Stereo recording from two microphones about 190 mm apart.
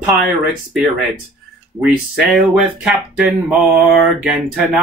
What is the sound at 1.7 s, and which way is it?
Speech, 5° right (ahead or behind).